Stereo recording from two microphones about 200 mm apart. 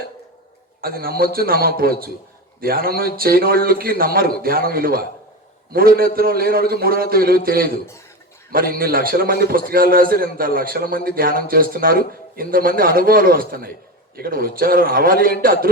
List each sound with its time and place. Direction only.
0.8 s a man's voice: 50° right (ahead or behind)